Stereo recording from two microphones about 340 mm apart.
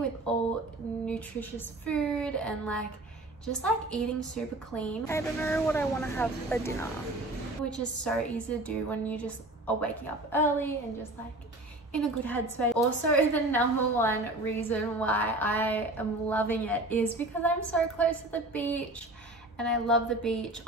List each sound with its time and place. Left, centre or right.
0.3 s a woman's voice: centre
11.9 s a woman's voice: centre